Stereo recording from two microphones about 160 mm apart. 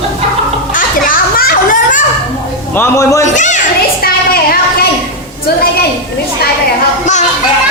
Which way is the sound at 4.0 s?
70° left (ahead or behind).